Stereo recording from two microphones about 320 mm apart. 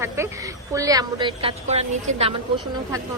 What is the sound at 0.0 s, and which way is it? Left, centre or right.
A woman's voice, centre.